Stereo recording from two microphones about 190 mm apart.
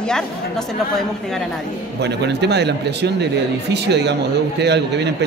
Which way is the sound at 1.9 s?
60° right (ahead or behind).